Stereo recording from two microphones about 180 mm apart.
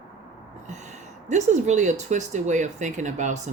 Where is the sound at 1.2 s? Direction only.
40° right (ahead or behind).